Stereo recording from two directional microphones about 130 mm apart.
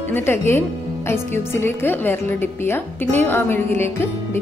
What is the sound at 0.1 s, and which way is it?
A woman's voice, 20° left (ahead or behind).